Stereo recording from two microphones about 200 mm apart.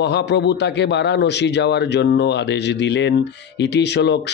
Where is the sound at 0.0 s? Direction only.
60° left (ahead or behind).